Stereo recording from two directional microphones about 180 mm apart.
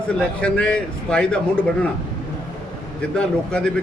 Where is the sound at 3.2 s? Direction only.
5° left (ahead or behind).